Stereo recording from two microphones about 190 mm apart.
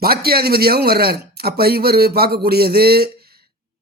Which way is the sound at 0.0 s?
55° right (ahead or behind).